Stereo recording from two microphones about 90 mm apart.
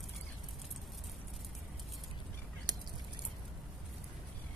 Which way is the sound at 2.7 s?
55° right (ahead or behind).